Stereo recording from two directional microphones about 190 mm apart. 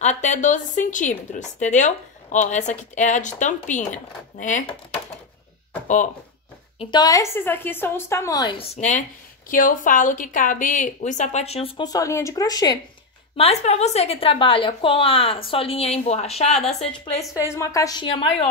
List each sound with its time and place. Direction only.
0.0 s a woman's voice: 40° left (ahead or behind)
6.8 s a woman's voice: 20° left (ahead or behind)
8.7 s a woman's voice: 40° left (ahead or behind); by 12.7 s 20° left (ahead or behind)
13.4 s a woman's voice: 35° left (ahead or behind)
17.3 s a woman's voice: 15° left (ahead or behind)